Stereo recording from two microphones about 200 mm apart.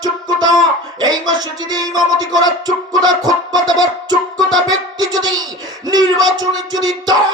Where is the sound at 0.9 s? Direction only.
20° right (ahead or behind).